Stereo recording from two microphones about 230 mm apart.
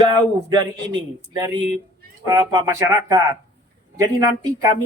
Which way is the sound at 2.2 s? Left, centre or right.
Centre.